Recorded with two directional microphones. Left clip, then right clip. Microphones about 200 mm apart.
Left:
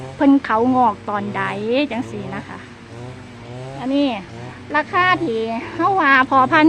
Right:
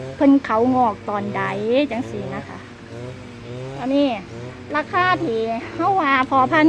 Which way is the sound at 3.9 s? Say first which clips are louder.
Even; 15° left (ahead or behind).